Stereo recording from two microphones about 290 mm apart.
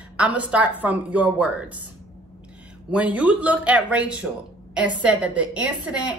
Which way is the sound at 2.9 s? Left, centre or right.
Centre.